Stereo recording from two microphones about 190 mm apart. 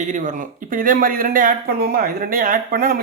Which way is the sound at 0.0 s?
40° right (ahead or behind).